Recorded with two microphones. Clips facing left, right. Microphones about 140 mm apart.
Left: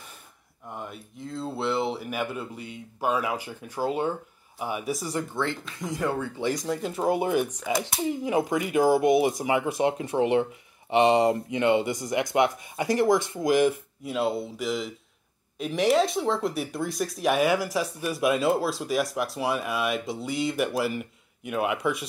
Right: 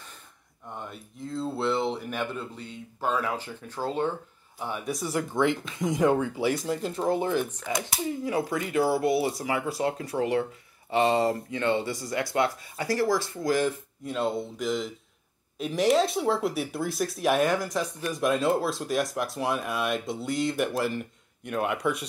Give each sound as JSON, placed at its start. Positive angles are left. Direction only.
{"t": 0.7, "sound": "speech", "side_deg": 5}
{"t": 4.9, "sound": "speech", "side_deg": 0}
{"t": 5.3, "sound": "speech", "side_deg": -20}
{"t": 7.1, "sound": "speech", "side_deg": 15}